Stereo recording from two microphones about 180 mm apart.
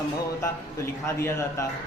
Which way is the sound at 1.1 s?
15° left (ahead or behind).